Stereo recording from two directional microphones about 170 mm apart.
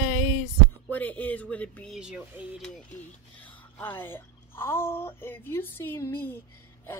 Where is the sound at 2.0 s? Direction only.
5° right (ahead or behind).